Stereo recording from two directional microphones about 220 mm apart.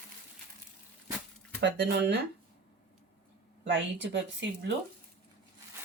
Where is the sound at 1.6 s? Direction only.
50° right (ahead or behind).